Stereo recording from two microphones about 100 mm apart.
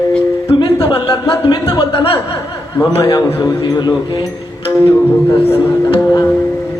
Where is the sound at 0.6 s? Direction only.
55° left (ahead or behind).